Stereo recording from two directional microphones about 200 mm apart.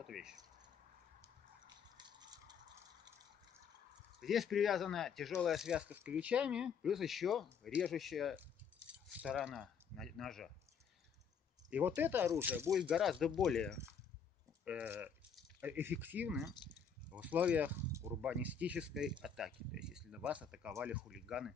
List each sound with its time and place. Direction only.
0.0 s speech: centre (ahead or behind)
2.0 s a sound: 20° right (ahead or behind)
4.2 s speech: centre (ahead or behind)
11.7 s speech: 10° right (ahead or behind)